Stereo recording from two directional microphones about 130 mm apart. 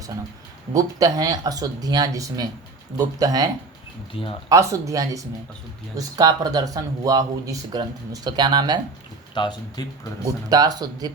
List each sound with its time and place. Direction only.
0.7 s speech: 25° right (ahead or behind)
4.1 s speech: 45° left (ahead or behind)
4.4 s speech: 25° right (ahead or behind)
9.3 s speech: 35° left (ahead or behind)
10.2 s speech: 30° right (ahead or behind)